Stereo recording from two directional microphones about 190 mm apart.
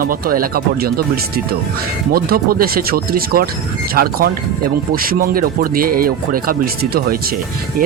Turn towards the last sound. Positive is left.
turn(degrees=-50)  # may be behind; listen again after turning